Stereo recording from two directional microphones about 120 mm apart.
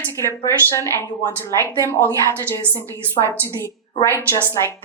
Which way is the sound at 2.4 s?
20° left (ahead or behind).